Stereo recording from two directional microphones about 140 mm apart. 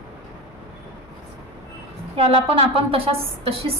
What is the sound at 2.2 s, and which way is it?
A woman's voice, 40° right (ahead or behind).